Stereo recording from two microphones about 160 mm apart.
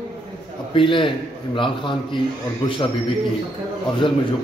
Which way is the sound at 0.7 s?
30° left (ahead or behind).